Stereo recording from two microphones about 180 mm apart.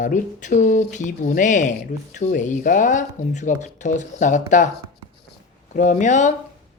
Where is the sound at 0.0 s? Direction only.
45° left (ahead or behind).